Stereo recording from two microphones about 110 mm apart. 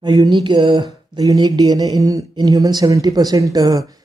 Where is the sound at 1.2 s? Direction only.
35° right (ahead or behind).